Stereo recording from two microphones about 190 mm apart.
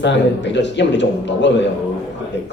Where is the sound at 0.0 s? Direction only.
70° left (ahead or behind).